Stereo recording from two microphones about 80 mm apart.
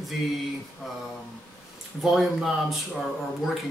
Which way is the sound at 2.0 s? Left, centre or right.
Centre.